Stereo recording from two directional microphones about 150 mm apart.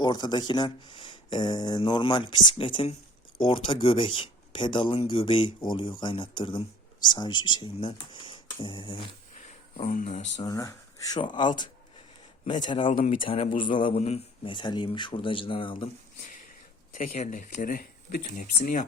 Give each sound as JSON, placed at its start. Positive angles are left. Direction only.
{"t": 0.0, "sound": "speech", "side_deg": 30}
{"t": 9.7, "sound": "speech", "side_deg": 55}
{"t": 10.4, "sound": "speech", "side_deg": 20}
{"t": 12.9, "sound": "speech", "side_deg": 60}
{"t": 13.2, "sound": "speech", "side_deg": 40}
{"t": 14.5, "sound": "speech", "side_deg": 30}
{"t": 16.9, "sound": "speech", "side_deg": 60}